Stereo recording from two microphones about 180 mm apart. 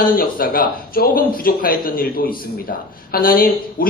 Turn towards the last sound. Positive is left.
turn(degrees=55)  # may be behind; listen again after turning